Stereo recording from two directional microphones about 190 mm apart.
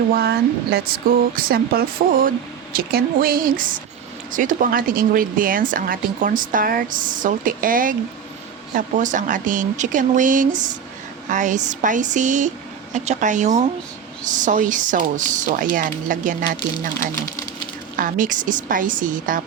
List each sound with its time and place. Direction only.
0.1 s speech: 55° right (ahead or behind)
17.9 s speech: 45° right (ahead or behind)